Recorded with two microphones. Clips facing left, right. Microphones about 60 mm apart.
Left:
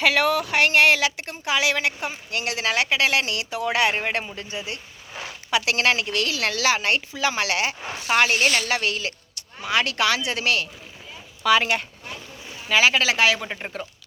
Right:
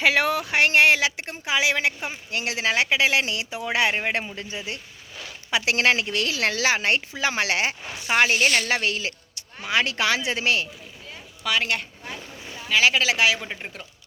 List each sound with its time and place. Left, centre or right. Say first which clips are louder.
0.0 s speech: left 1 dB; right
5.5 s speech: even; right
11.4 s speech: left 5 dB; centre
12.0 s boat: right 1 dB; right
12.6 s speech: left 1 dB; centre